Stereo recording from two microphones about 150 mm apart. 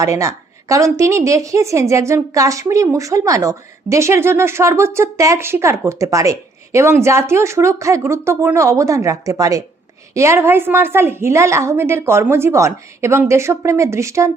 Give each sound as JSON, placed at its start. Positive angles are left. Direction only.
{"t": 0.0, "sound": "a woman's voice", "side_deg": -20}